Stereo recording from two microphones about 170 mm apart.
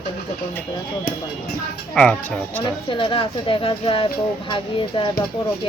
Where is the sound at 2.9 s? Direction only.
30° left (ahead or behind).